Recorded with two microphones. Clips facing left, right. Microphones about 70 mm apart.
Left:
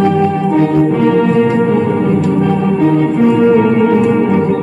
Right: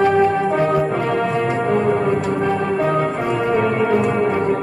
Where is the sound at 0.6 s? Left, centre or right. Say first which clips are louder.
Left 7 dB; centre.